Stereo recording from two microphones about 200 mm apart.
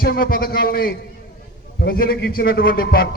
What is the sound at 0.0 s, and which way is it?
A man's voice, 45° left (ahead or behind).